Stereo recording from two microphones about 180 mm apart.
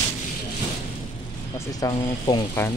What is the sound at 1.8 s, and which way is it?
Speech, 20° left (ahead or behind).